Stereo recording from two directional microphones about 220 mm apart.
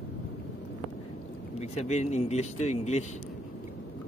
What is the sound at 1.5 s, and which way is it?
Speech, 30° left (ahead or behind).